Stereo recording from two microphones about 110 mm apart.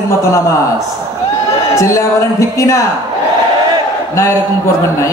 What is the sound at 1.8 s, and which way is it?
A man's voice, 30° left (ahead or behind).